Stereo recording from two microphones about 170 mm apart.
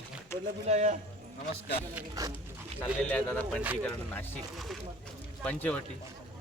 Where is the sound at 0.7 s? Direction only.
45° right (ahead or behind).